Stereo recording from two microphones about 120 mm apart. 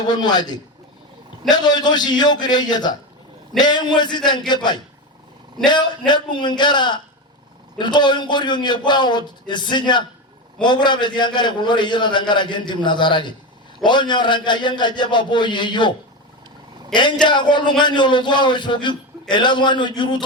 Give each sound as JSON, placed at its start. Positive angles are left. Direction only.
{"t": 0.1, "sound": "a man's voice", "side_deg": 35}
{"t": 6.1, "sound": "a man's voice", "side_deg": 40}
{"t": 16.9, "sound": "a man's voice", "side_deg": 40}